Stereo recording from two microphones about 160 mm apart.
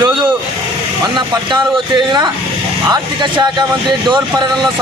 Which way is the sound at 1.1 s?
30° right (ahead or behind).